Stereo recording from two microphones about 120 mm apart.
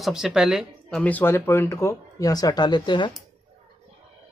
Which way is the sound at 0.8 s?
10° left (ahead or behind).